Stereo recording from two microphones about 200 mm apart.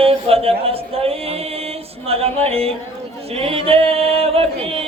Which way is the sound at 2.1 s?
30° right (ahead or behind).